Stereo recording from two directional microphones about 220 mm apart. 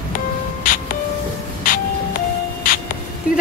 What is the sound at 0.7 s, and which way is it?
Music, 40° left (ahead or behind).